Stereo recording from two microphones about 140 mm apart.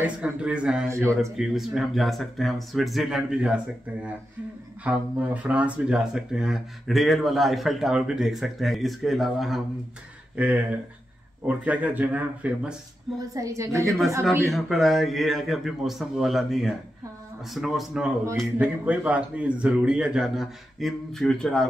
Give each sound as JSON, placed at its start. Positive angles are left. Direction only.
{"t": 0.0, "sound": "speech", "side_deg": -10}
{"t": 0.8, "sound": "a woman's voice", "side_deg": -20}
{"t": 1.3, "sound": "speech", "side_deg": -5}
{"t": 10.3, "sound": "speech", "side_deg": -10}
{"t": 13.3, "sound": "a woman's voice", "side_deg": -25}
{"t": 14.5, "sound": "speech", "side_deg": 0}